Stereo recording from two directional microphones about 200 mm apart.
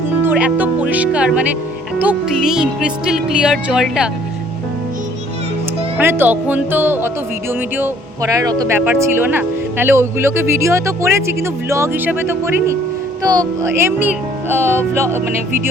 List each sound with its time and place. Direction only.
0.2 s speech: 10° right (ahead or behind)
2.0 s music: 5° right (ahead or behind)
6.0 s speech: 10° right (ahead or behind)